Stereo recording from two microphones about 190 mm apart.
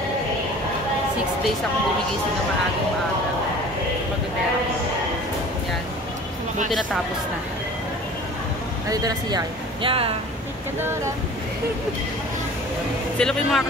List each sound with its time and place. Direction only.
8.8 s speech: 20° right (ahead or behind)
13.2 s speech: centre (ahead or behind)